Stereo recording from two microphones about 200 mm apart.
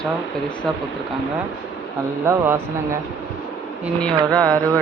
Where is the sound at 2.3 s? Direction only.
10° right (ahead or behind).